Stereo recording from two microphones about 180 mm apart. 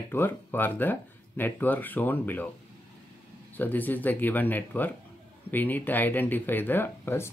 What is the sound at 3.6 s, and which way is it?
Speech, 10° left (ahead or behind).